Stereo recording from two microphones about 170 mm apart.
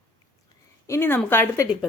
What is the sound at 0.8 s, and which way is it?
Speech, 15° left (ahead or behind).